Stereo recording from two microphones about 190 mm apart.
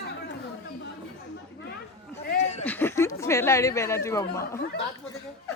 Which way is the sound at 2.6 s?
10° left (ahead or behind).